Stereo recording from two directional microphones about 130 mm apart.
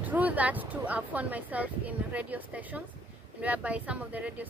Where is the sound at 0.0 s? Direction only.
10° right (ahead or behind).